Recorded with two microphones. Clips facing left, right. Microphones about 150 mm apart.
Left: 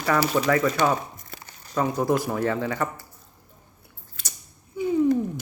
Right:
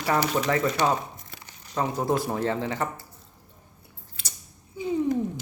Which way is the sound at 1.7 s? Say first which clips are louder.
Left 3 dB; 25° right (ahead or behind).